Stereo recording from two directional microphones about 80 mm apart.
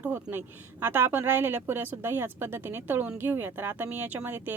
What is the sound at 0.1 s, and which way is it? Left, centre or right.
Speech, right.